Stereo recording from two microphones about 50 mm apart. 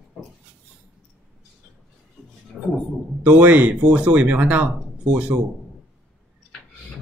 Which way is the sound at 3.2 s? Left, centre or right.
Right.